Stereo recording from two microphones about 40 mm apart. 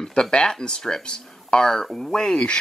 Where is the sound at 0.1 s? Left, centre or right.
Left.